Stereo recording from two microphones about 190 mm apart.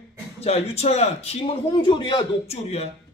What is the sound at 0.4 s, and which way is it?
Speech, 35° left (ahead or behind).